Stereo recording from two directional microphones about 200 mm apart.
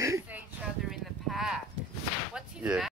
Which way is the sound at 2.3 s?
5° right (ahead or behind).